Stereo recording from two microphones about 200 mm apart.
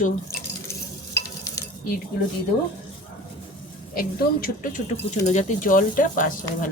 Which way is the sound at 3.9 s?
45° left (ahead or behind).